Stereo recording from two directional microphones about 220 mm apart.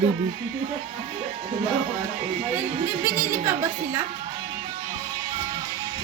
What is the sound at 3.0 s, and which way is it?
Speech, 10° right (ahead or behind).